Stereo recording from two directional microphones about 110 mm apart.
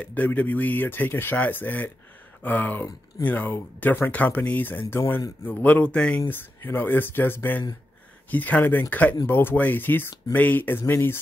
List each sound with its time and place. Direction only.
0.0 s speech: 15° left (ahead or behind)